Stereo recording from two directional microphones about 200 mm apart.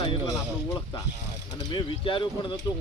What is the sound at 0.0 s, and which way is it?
Speech, 20° left (ahead or behind).